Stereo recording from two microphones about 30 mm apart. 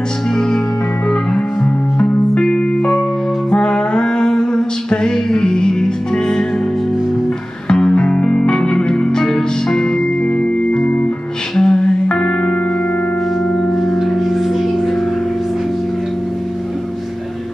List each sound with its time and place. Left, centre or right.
3.4 s music: left
7.9 s music: left; by 9.8 s centre
11.5 s music: centre